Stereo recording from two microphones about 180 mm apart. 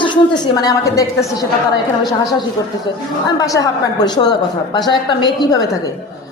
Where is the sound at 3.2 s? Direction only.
20° left (ahead or behind).